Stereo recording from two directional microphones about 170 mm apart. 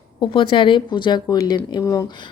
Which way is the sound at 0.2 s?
30° left (ahead or behind).